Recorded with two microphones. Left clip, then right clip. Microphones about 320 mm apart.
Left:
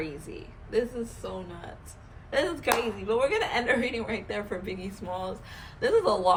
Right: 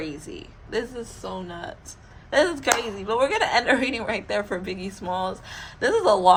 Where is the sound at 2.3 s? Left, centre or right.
Right.